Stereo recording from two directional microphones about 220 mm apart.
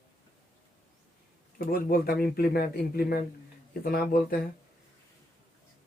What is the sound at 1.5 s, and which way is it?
Speech, 40° left (ahead or behind).